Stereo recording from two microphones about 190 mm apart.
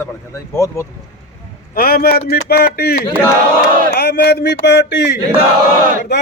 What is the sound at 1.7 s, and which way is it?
A man's voice, 50° left (ahead or behind).